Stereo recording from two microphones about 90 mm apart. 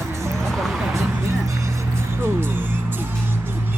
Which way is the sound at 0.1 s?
30° right (ahead or behind).